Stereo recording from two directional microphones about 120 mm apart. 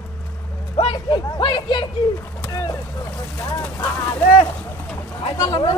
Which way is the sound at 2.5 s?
30° left (ahead or behind).